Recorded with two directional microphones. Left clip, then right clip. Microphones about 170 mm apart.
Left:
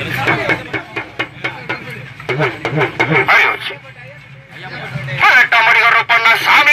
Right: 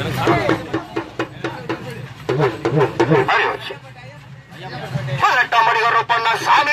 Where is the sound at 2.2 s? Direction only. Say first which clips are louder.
Left 1 dB; 25° left (ahead or behind).